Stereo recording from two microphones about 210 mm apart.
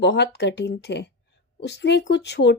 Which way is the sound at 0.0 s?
55° left (ahead or behind).